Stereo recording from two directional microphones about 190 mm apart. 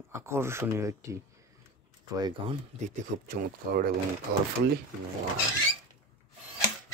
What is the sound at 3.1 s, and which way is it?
Speech, 45° right (ahead or behind).